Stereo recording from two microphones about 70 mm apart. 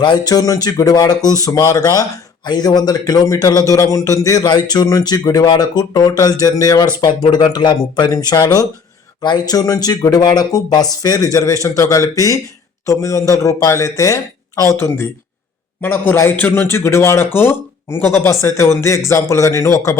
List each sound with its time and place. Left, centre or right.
0.0 s speech: left
2.4 s speech: left
4.4 s speech: left
7.0 s a man's voice: left
15.8 s a man's voice: left
16.7 s speech: left